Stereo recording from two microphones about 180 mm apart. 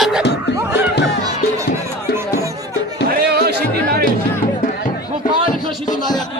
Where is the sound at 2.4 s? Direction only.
20° right (ahead or behind).